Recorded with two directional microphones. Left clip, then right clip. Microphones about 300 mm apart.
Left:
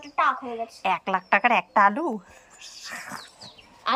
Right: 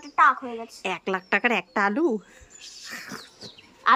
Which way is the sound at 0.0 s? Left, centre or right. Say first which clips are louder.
Right 4 dB; centre.